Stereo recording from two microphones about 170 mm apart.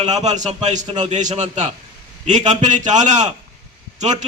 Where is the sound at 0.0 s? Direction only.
40° right (ahead or behind).